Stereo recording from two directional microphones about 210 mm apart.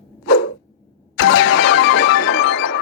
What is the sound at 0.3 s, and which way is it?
Dog, 65° left (ahead or behind).